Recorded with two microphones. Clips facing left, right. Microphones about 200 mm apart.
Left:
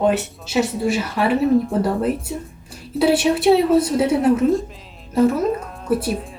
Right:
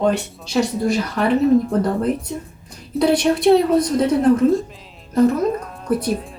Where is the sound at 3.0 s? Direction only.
5° left (ahead or behind).